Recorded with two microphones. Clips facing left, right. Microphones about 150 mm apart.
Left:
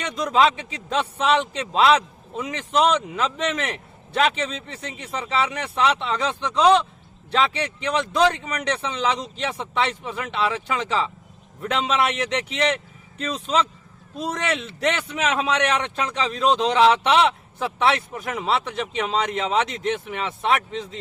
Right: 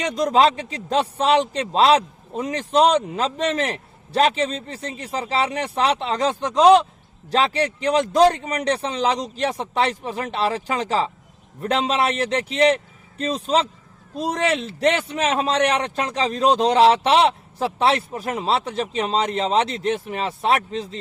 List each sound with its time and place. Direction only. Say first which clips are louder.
0.0 s a man's voice: right 2 dB; 35° right (ahead or behind)